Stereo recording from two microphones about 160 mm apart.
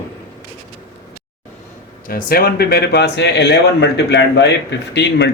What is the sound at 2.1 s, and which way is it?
Speech, 70° left (ahead or behind).